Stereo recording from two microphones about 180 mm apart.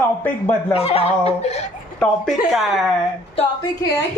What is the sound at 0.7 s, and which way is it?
Speech, 35° left (ahead or behind).